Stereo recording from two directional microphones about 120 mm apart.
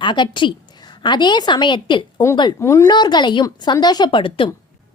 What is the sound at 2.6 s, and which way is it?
Speech, 25° left (ahead or behind).